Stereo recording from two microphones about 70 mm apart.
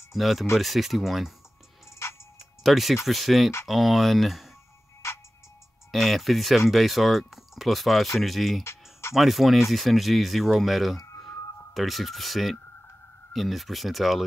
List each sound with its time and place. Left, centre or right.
0.1 s speech: centre
2.6 s speech: centre
5.0 s music: left
5.9 s speech: centre